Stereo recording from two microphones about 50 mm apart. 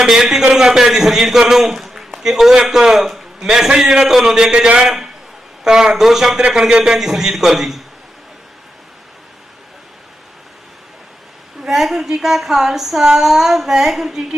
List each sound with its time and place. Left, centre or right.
0.0 s a man's voice: centre
11.6 s a man's voice: centre